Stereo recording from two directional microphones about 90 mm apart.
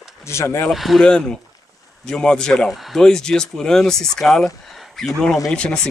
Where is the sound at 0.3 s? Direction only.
30° left (ahead or behind).